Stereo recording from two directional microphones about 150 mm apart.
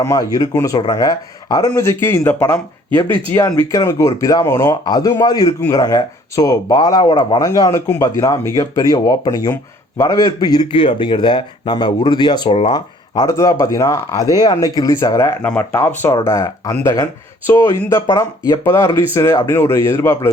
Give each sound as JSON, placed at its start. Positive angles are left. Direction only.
{"t": 0.0, "sound": "speech", "side_deg": 20}
{"t": 5.5, "sound": "speech", "side_deg": 15}
{"t": 5.8, "sound": "speech", "side_deg": 25}